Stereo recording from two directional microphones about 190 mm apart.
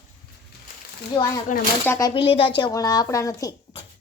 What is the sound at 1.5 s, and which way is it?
Speech, 40° left (ahead or behind).